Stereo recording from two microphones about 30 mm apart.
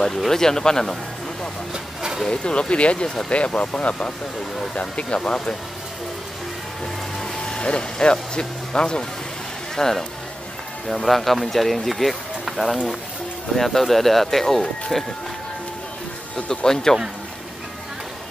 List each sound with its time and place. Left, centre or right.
0.3 s speech: centre
2.2 s speech: left
4.7 s speech: left
5.2 s speech: left
7.4 s speech: left
9.8 s speech: centre
10.9 s speech: centre
16.4 s speech: centre